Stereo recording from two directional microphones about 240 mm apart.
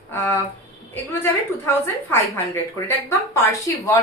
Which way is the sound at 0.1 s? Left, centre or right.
Centre.